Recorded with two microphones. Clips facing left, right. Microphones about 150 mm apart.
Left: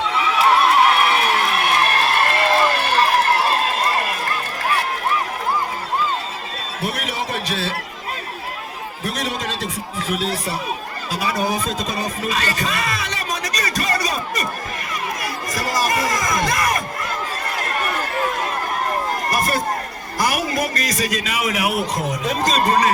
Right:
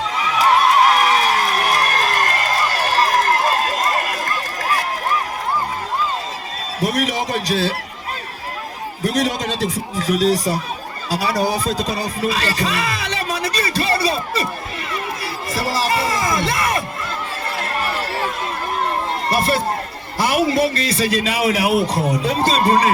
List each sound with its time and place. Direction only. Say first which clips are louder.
0.0 s a sound: even; 35° right (ahead or behind)
6.7 s a man's voice: right 6 dB; 40° right (ahead or behind)
9.0 s a man's voice: right 6 dB; 35° right (ahead or behind)
17.6 s run: right 1 dB; 30° right (ahead or behind)
19.3 s a man's voice: right 4 dB; 30° right (ahead or behind)